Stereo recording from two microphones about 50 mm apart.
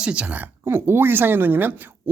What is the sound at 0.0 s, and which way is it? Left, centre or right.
Speech, right.